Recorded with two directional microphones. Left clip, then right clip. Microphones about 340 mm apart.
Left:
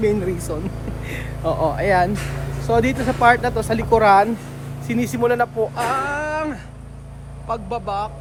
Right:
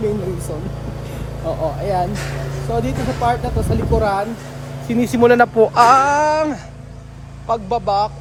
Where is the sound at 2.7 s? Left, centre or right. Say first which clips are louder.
Left 4 dB; centre.